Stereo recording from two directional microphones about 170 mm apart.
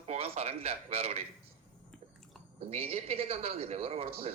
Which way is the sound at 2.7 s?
35° right (ahead or behind).